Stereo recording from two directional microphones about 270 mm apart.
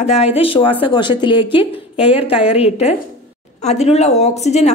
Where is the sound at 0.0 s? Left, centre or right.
Left.